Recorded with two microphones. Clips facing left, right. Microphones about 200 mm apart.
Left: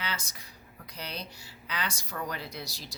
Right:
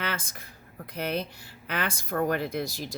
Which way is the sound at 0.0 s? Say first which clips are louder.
Right 5 dB; 55° right (ahead or behind).